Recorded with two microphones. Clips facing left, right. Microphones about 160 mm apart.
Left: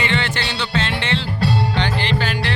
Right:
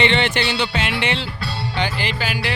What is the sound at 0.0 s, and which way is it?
Speech, 20° right (ahead or behind).